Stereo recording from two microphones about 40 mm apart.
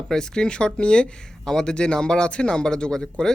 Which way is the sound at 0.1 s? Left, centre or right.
Centre.